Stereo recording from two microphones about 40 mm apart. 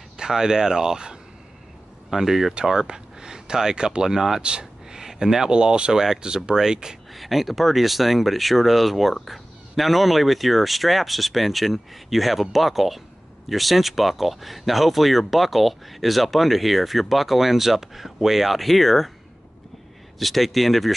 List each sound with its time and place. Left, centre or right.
0.2 s speech: centre
4.4 s a sound: right
5.0 s speech: centre
7.2 s speech: centre
20.2 s speech: centre